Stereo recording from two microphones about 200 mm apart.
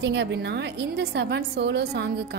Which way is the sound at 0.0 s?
60° right (ahead or behind).